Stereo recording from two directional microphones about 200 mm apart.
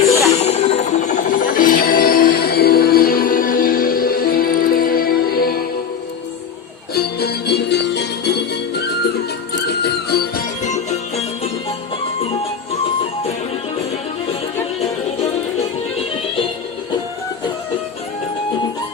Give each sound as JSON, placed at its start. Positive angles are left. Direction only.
{"t": 0.3, "sound": "music", "side_deg": 35}
{"t": 6.9, "sound": "music", "side_deg": 50}
{"t": 10.6, "sound": "music", "side_deg": 35}